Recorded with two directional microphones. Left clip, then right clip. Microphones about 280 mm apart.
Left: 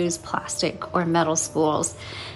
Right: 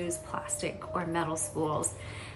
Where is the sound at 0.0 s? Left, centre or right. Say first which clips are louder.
Left 9 dB; centre.